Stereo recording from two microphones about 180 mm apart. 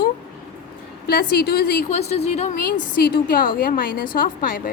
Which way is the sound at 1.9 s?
35° left (ahead or behind).